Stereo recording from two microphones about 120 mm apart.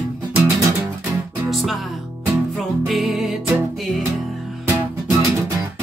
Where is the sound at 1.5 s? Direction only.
Centre (ahead or behind).